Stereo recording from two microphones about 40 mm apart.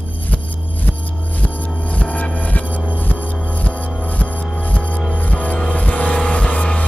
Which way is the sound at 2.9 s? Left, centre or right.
Left.